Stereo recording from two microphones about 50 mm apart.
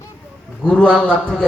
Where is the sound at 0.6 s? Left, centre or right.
Centre.